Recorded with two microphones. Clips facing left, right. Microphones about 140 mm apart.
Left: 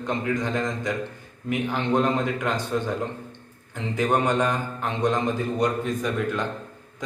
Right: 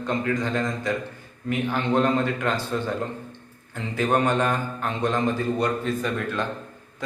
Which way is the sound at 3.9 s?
15° left (ahead or behind).